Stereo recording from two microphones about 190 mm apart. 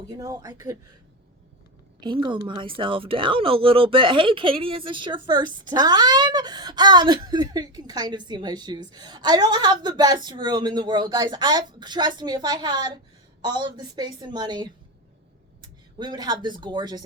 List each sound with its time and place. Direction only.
0.1 s speech: 20° right (ahead or behind)
2.0 s a woman's voice: 25° right (ahead or behind)